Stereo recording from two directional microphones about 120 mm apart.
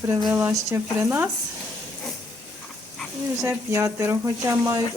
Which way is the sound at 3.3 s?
20° right (ahead or behind).